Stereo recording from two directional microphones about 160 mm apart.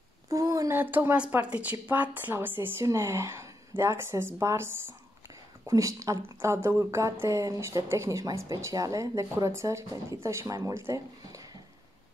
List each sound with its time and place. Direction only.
0.3 s a woman's voice: 20° right (ahead or behind)